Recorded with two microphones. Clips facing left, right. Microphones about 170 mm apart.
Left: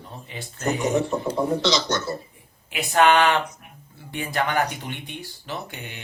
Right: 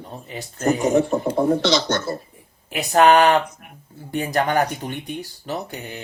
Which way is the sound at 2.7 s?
40° right (ahead or behind).